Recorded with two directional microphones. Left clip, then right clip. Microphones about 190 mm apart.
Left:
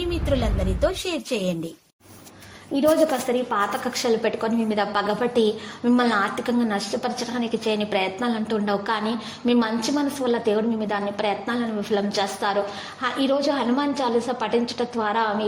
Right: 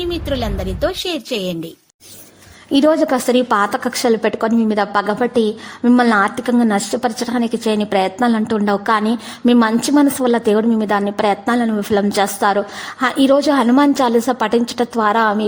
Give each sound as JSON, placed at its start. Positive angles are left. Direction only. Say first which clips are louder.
{"t": 0.8, "sound": "a woman's voice", "louder": "right 5 dB", "side_deg": -30}
{"t": 2.7, "sound": "a woman's voice", "louder": "right 6 dB", "side_deg": -40}